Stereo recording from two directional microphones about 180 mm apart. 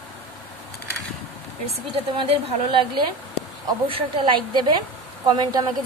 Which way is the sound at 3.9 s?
30° right (ahead or behind).